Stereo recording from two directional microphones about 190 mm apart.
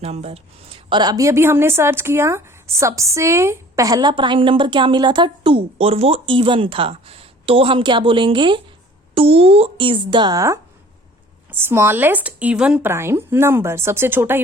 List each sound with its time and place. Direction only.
0.0 s a woman's voice: 35° right (ahead or behind); by 14.4 s 10° right (ahead or behind)